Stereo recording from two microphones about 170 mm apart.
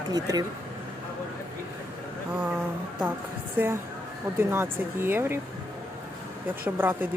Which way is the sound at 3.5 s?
15° right (ahead or behind).